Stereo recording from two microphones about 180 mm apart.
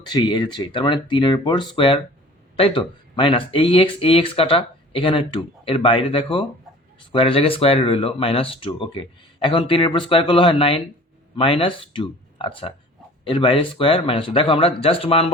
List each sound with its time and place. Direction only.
0.0 s speech: 25° left (ahead or behind)